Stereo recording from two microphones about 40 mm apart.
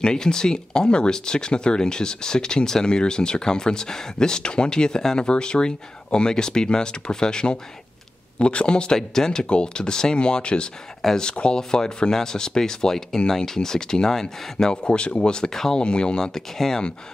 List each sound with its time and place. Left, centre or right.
0.0 s speech: centre
15.5 s speech: centre
15.8 s speech: left
16.3 s speech: centre